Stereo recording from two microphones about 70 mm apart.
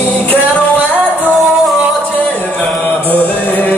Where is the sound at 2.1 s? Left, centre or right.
Left.